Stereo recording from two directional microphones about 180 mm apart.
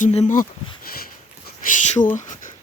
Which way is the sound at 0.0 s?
40° left (ahead or behind).